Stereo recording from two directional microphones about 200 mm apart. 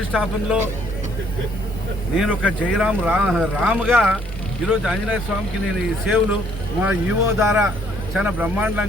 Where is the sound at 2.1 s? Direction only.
Centre (ahead or behind).